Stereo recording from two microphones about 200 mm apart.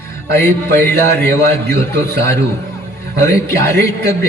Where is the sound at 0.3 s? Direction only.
10° left (ahead or behind).